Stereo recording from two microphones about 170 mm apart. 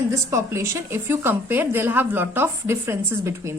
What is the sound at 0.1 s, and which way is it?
A woman's voice, 15° right (ahead or behind).